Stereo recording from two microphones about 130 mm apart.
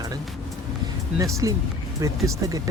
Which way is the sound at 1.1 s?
25° right (ahead or behind).